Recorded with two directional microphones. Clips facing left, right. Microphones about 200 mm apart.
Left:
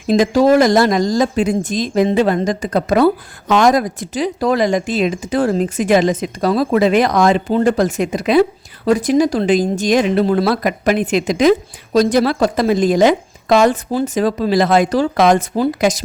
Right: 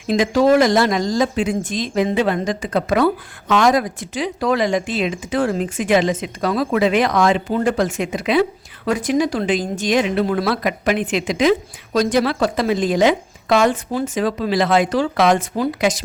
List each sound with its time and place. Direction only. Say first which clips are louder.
0.1 s speech: left 3 dB; 40° left (ahead or behind)